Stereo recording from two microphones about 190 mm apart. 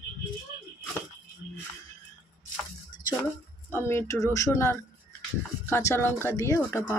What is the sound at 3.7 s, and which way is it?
Speech, 10° left (ahead or behind).